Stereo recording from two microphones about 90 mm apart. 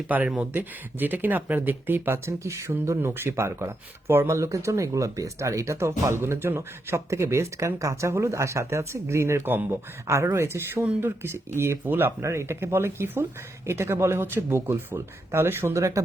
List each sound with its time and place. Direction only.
0.1 s speech: 15° right (ahead or behind); by 16.0 s 35° right (ahead or behind)